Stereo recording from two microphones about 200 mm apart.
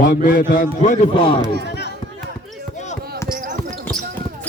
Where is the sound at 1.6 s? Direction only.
55° left (ahead or behind).